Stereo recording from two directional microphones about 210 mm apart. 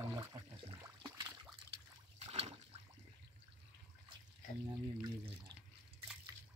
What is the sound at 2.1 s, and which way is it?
Water, 30° right (ahead or behind).